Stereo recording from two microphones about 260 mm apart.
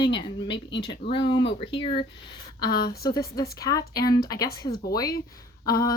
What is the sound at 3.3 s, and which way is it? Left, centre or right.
A woman's voice, centre.